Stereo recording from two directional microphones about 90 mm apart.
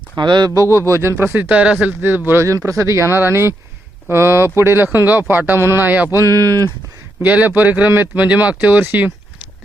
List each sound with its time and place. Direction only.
0.2 s speech: 55° right (ahead or behind)
0.5 s speech: 35° right (ahead or behind)
1.5 s speech: 10° right (ahead or behind)
6.1 s speech: 40° right (ahead or behind)
7.2 s speech: 20° right (ahead or behind)